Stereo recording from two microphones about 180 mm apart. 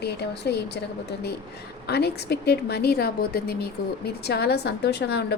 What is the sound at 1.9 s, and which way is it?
A woman's voice, 65° left (ahead or behind).